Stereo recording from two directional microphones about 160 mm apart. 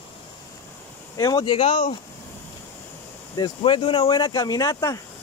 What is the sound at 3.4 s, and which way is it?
Speech, 30° left (ahead or behind).